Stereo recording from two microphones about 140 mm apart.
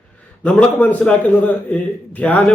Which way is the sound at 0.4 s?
10° left (ahead or behind).